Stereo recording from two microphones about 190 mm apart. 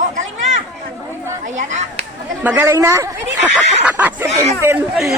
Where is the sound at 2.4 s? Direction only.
10° right (ahead or behind).